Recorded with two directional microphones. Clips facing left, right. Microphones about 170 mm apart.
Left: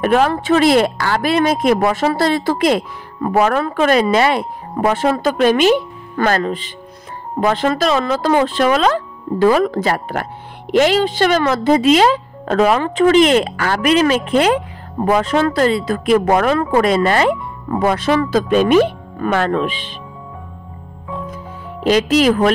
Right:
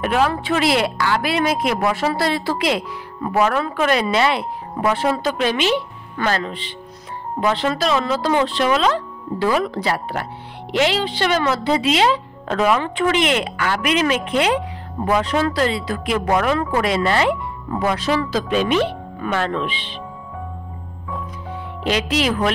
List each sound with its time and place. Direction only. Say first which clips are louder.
0.0 s speech: left 4 dB; 45° left (ahead or behind)
21.8 s speech: left 7 dB; 40° left (ahead or behind)